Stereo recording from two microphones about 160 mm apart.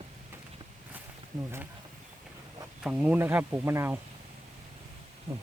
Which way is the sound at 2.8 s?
5° right (ahead or behind).